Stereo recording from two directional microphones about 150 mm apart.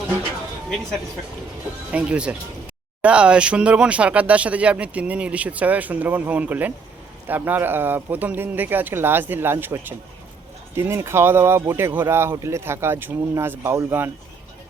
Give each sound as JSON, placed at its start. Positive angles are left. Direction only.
{"t": 1.9, "sound": "speech", "side_deg": -10}